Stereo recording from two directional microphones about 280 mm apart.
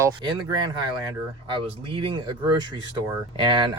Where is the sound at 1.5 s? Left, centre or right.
Centre.